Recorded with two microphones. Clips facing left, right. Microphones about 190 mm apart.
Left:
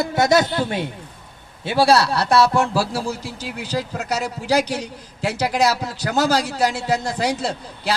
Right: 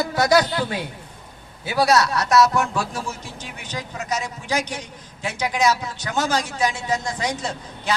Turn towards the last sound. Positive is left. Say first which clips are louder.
# left 3 dB
turn(degrees=35)  # may be behind; listen again after turning